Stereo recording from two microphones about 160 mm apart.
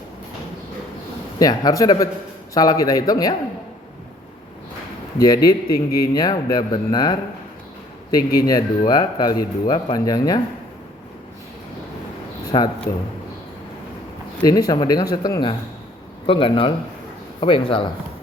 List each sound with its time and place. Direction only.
1.4 s a man's voice: 25° left (ahead or behind)
5.1 s a man's voice: 25° left (ahead or behind)
8.4 s a man's voice: 25° left (ahead or behind)
12.5 s a man's voice: 25° left (ahead or behind)
14.4 s a man's voice: 25° left (ahead or behind)